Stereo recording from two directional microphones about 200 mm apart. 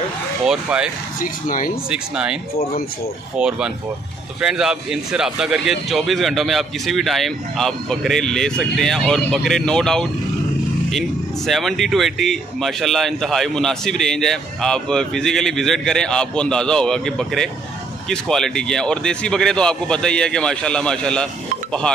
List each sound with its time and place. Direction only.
0.5 s speech: 5° right (ahead or behind)
1.2 s speech: 40° left (ahead or behind)
1.9 s speech: 5° right (ahead or behind)
3.3 s speech: 5° right (ahead or behind)